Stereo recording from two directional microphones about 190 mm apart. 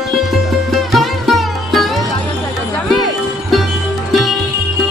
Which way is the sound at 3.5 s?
Centre (ahead or behind).